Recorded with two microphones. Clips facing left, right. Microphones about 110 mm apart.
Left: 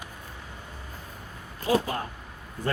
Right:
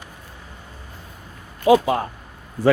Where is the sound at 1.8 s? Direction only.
90° right.